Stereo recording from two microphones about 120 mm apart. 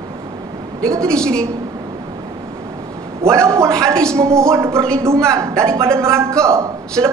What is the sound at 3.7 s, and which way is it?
Speech, 5° left (ahead or behind).